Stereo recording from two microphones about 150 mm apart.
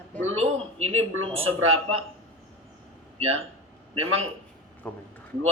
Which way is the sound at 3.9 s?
40° right (ahead or behind).